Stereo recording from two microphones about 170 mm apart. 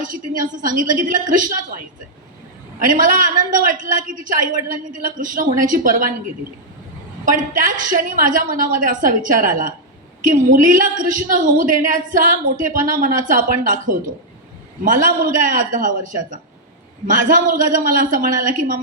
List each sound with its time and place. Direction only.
0.0 s a woman's voice: 50° right (ahead or behind)
2.9 s a woman's voice: 50° right (ahead or behind)
7.3 s a woman's voice: 50° right (ahead or behind)